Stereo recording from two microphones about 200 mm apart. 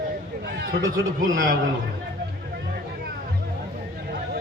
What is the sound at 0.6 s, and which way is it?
Speech, 55° right (ahead or behind).